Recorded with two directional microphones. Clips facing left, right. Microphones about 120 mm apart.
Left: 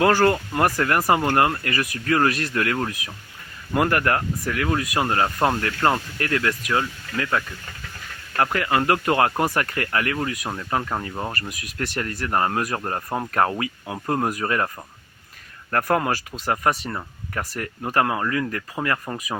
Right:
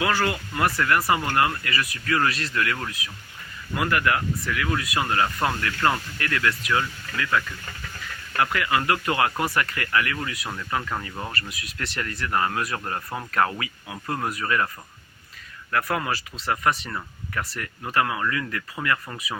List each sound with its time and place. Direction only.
0.0 s speech: 40° left (ahead or behind)
3.8 s speech: 45° left (ahead or behind)
5.0 s speech: 35° left (ahead or behind)
10.5 s speech: 30° left (ahead or behind)
11.3 s speech: 45° left (ahead or behind)
15.7 s speech: 45° left (ahead or behind)